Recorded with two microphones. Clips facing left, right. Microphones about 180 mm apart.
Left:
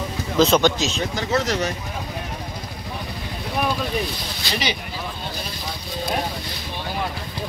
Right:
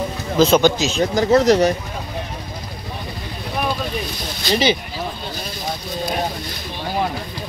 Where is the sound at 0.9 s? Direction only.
40° right (ahead or behind).